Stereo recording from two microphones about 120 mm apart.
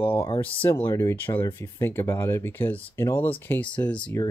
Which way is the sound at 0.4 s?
15° left (ahead or behind).